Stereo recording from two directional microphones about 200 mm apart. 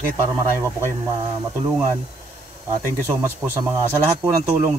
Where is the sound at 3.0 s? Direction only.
10° right (ahead or behind).